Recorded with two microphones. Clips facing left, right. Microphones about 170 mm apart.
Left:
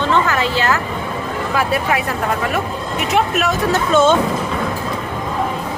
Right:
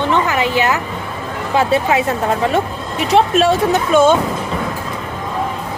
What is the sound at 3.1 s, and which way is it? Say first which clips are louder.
Speech: right 6 dB; 30° right (ahead or behind).